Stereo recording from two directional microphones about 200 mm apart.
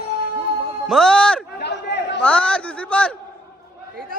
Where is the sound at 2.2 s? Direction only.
5° left (ahead or behind).